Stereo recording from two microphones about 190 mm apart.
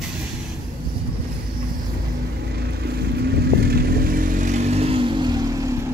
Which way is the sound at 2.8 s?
55° right (ahead or behind).